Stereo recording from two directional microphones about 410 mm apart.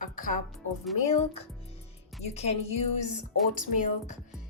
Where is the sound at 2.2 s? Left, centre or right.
Centre.